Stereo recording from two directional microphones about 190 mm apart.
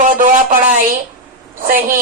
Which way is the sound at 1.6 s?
50° right (ahead or behind).